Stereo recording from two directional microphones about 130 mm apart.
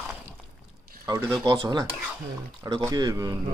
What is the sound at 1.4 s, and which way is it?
Speech, 30° right (ahead or behind).